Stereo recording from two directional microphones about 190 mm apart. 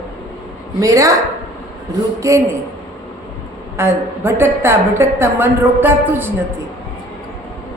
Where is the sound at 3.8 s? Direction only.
15° right (ahead or behind).